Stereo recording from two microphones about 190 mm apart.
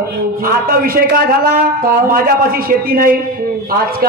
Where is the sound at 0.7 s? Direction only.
50° right (ahead or behind).